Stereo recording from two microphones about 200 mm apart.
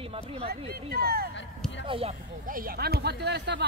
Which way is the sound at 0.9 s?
50° right (ahead or behind).